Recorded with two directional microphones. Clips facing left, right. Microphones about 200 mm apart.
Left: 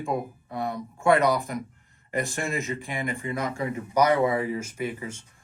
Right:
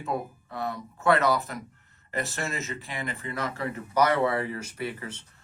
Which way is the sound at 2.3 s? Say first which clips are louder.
Left 4 dB; 15° left (ahead or behind).